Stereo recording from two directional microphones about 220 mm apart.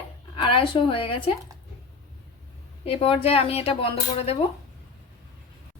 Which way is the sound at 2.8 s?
25° left (ahead or behind).